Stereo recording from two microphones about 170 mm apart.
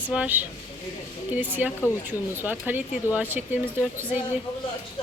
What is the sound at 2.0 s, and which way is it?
Speech, 10° right (ahead or behind).